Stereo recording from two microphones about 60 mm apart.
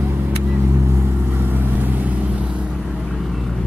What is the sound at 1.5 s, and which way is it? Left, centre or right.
Vehicle, right.